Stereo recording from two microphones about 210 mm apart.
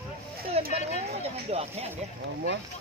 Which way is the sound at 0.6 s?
30° right (ahead or behind).